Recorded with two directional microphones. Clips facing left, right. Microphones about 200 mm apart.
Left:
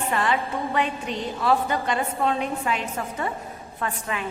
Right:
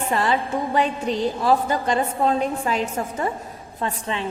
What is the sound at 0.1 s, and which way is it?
A woman's voice, 35° right (ahead or behind).